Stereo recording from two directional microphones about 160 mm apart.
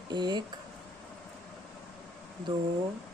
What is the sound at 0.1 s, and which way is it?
Speech, 25° right (ahead or behind).